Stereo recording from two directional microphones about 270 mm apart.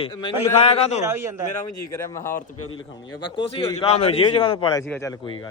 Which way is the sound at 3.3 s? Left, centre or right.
Centre.